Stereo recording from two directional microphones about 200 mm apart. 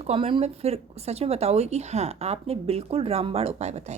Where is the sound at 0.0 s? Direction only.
30° right (ahead or behind).